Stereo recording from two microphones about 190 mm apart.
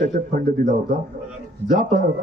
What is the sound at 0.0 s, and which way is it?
Speech, 45° right (ahead or behind).